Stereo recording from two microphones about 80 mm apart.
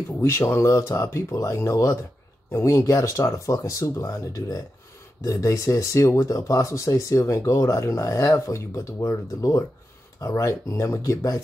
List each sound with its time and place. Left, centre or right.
0.2 s speech: left